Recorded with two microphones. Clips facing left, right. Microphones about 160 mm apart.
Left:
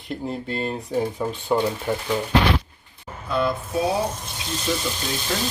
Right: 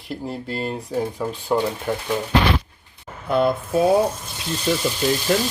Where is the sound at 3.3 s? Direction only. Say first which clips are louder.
Right 4 dB; 55° right (ahead or behind).